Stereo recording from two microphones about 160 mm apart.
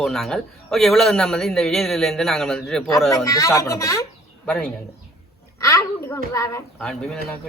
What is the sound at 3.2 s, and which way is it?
Speech, 20° left (ahead or behind).